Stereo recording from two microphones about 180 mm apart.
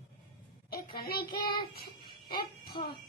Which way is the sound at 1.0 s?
60° left (ahead or behind).